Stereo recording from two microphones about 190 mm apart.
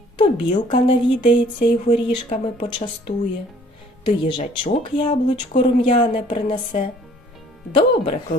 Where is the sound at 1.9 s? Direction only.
20° left (ahead or behind).